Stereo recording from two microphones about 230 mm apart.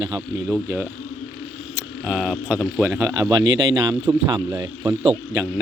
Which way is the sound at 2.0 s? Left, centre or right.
Centre.